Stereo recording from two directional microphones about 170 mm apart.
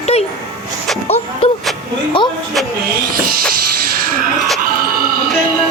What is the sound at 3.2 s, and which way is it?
Music, 60° right (ahead or behind).